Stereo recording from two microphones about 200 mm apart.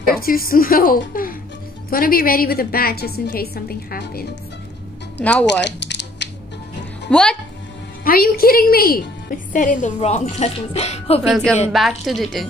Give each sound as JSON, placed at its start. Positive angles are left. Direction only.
{"t": 0.0, "sound": "a woman's voice", "side_deg": 45}
{"t": 5.1, "sound": "speech", "side_deg": 5}
{"t": 5.7, "sound": "a sound", "side_deg": 60}
{"t": 7.1, "sound": "speech", "side_deg": 5}
{"t": 8.0, "sound": "a woman's voice", "side_deg": 45}
{"t": 11.2, "sound": "speech", "side_deg": 0}